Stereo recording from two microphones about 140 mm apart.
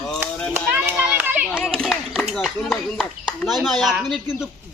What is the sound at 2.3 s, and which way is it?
Speech, 5° left (ahead or behind).